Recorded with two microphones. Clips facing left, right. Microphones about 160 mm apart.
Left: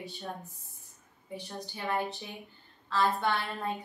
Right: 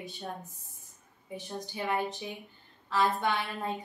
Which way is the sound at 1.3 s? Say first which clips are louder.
Right 2 dB; 20° right (ahead or behind).